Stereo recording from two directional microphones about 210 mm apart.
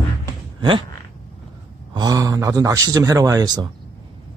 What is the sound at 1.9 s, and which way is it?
Speech, 15° right (ahead or behind).